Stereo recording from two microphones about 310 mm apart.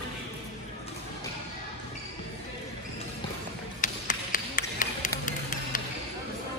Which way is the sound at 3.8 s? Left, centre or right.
Left.